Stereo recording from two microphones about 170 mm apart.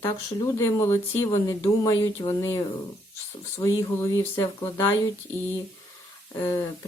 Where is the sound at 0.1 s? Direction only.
15° left (ahead or behind).